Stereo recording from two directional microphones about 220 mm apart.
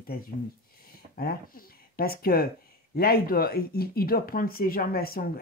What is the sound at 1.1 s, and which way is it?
Speech, 40° left (ahead or behind).